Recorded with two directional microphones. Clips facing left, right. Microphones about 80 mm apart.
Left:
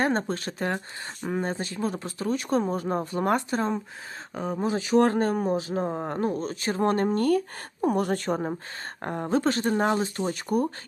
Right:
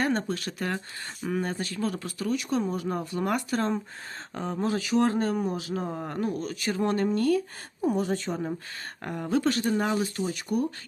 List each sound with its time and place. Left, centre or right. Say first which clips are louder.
0.0 s speech: left 2 dB; left
4.4 s speech: left 2 dB; centre
4.6 s speech: left 1 dB; left
4.9 s speech: left 4 dB; left
9.0 s speech: left 2 dB; left